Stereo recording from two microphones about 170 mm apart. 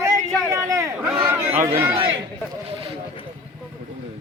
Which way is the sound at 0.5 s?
15° right (ahead or behind).